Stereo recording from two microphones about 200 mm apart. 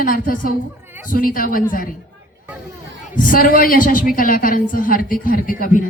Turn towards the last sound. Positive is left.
turn(degrees=45)  # may be behind; listen again after turning